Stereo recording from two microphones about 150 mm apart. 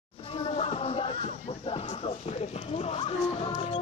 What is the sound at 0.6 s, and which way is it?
Music, 40° left (ahead or behind).